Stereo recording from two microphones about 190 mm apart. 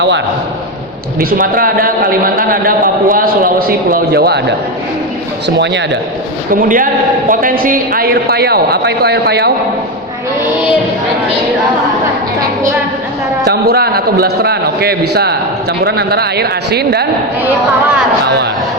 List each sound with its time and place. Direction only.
1.2 s a man's voice: 50° right (ahead or behind)
5.5 s a man's voice: 70° right (ahead or behind)
6.5 s a man's voice: 45° right (ahead or behind)
13.4 s a man's voice: 55° right (ahead or behind)